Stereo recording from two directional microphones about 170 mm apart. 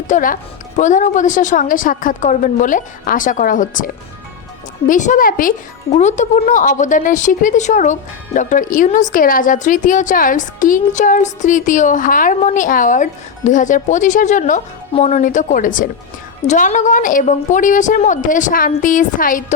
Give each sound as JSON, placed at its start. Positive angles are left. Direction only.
{"t": 0.1, "sound": "speech", "side_deg": 55}
{"t": 4.9, "sound": "speech", "side_deg": 50}
{"t": 5.9, "sound": "speech", "side_deg": 40}